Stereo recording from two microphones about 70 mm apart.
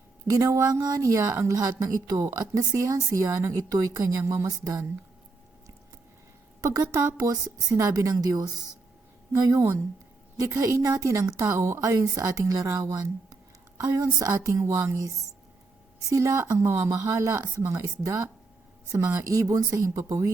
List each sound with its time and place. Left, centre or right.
0.3 s a woman's voice: right
6.6 s speech: right
8.1 s speech: right
9.3 s a woman's voice: right
19.2 s a woman's voice: right